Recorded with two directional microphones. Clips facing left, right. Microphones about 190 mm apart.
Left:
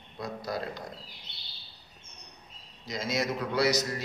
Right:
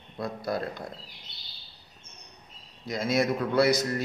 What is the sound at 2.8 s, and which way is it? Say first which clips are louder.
A man's voice: right 5 dB; 55° right (ahead or behind).